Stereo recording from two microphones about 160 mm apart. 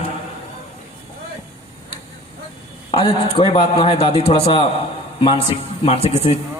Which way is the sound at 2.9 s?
35° left (ahead or behind).